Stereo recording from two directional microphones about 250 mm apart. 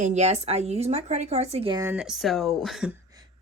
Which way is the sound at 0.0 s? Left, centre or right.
Right.